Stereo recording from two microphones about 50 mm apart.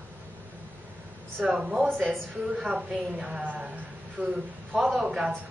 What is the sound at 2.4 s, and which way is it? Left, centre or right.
A woman's voice, centre.